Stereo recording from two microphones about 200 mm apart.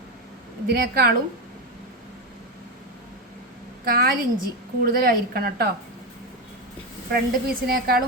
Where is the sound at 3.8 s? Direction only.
45° right (ahead or behind).